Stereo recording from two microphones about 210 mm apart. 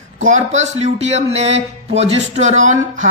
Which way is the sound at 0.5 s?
30° right (ahead or behind).